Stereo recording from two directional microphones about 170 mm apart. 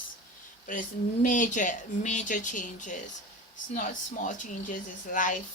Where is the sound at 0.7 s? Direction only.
50° left (ahead or behind).